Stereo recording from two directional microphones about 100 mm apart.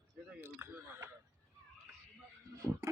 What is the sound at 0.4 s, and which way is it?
Speech, 20° right (ahead or behind).